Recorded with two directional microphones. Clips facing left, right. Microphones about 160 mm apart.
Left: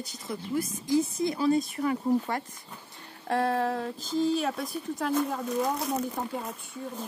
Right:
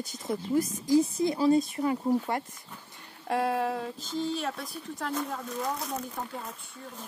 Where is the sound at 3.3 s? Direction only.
10° right (ahead or behind).